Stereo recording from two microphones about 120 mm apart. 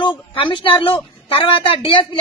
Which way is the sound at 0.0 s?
45° left (ahead or behind).